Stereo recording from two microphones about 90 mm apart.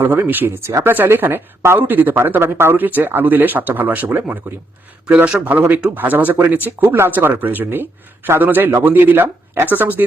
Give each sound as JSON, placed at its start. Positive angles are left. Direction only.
{"t": 0.0, "sound": "speech", "side_deg": -25}